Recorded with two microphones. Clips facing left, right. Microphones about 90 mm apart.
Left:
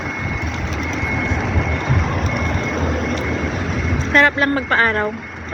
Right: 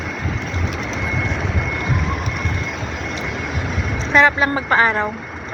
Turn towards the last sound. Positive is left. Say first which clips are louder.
# right 1 dB
turn(degrees=-15)  # may be behind; listen again after turning